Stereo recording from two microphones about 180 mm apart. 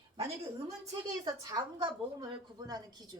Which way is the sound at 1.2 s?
20° right (ahead or behind).